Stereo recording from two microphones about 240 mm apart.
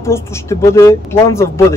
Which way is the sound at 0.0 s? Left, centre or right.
Centre.